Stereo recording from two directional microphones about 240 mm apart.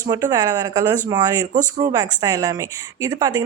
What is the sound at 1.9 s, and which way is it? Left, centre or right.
A woman's voice, centre.